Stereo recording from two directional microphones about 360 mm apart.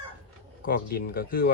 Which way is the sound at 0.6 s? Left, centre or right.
Left.